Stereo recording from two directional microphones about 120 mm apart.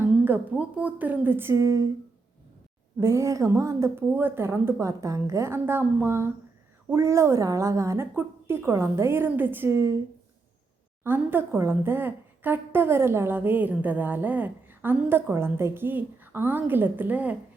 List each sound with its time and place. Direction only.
0.0 s a woman's voice: 15° right (ahead or behind)
3.0 s a woman's voice: 25° right (ahead or behind)
11.0 s a woman's voice: 15° right (ahead or behind)